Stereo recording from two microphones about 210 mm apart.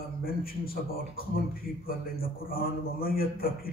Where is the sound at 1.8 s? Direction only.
45° left (ahead or behind).